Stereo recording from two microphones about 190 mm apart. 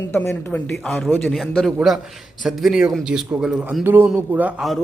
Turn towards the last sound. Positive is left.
turn(degrees=-5)  # may be behind; listen again after turning